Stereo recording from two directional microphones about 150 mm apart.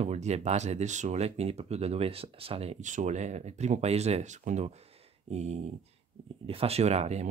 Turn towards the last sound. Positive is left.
turn(degrees=-45)  # may be behind; listen again after turning